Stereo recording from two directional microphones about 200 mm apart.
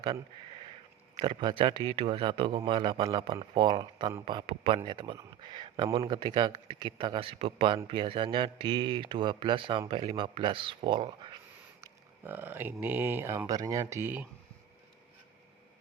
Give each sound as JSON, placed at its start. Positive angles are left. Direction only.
{"t": 1.2, "sound": "a man's voice", "side_deg": -20}
{"t": 11.8, "sound": "speech", "side_deg": -10}